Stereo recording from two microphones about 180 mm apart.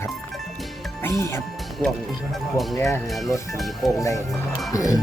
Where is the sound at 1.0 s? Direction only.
15° left (ahead or behind).